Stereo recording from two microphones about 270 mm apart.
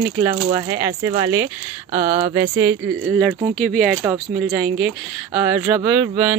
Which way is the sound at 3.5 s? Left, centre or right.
Centre.